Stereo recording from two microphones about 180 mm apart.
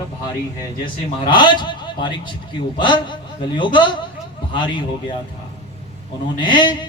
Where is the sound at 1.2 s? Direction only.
25° left (ahead or behind).